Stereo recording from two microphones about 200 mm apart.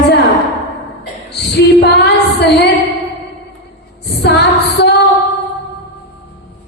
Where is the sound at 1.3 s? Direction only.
55° left (ahead or behind).